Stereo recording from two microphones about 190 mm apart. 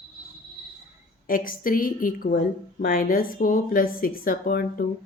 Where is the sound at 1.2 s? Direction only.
45° left (ahead or behind).